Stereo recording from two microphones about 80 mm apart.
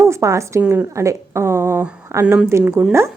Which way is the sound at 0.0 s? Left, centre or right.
Right.